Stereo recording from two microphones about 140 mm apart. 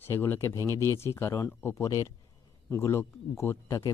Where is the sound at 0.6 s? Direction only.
25° right (ahead or behind).